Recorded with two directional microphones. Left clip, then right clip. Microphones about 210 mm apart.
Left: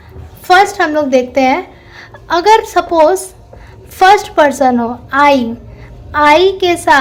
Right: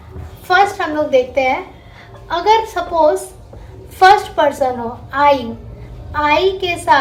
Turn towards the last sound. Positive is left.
turn(degrees=50)  # may be behind; listen again after turning